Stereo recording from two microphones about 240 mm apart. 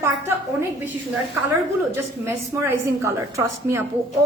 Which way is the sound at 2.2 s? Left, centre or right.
Centre.